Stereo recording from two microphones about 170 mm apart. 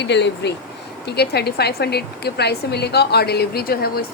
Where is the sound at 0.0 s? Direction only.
90° left.